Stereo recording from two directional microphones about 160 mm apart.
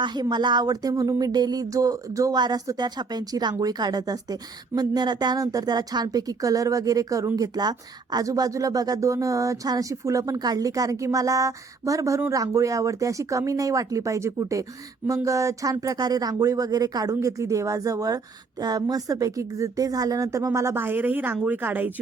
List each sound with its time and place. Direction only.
0.0 s a woman's voice: 25° right (ahead or behind); by 21.9 s 10° right (ahead or behind)